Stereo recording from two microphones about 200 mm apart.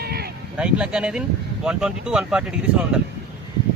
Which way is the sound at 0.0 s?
50° right (ahead or behind).